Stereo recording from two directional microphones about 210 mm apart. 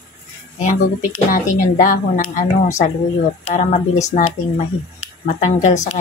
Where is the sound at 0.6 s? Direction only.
40° left (ahead or behind).